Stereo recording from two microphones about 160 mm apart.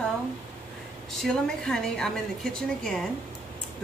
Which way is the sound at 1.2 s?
5° left (ahead or behind).